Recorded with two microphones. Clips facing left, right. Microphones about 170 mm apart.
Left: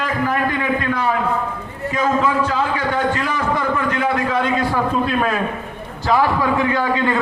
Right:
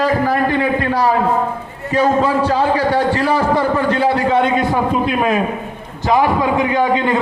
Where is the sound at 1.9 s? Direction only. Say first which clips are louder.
Right 4 dB; 35° right (ahead or behind).